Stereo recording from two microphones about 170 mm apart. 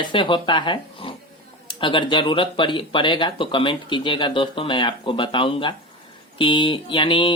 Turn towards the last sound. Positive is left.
turn(degrees=30)  # may be behind; listen again after turning